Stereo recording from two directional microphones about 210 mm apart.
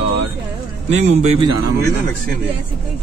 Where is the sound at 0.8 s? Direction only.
30° right (ahead or behind).